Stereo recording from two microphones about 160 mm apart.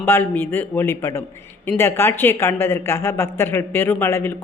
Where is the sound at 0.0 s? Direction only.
15° left (ahead or behind).